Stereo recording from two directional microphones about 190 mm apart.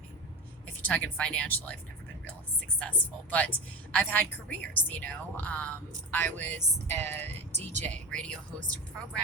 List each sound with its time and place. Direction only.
0.8 s a woman's voice: 10° left (ahead or behind)
2.7 s a woman's voice: 10° left (ahead or behind)
7.5 s speech: 40° right (ahead or behind)
7.9 s speech: 5° left (ahead or behind)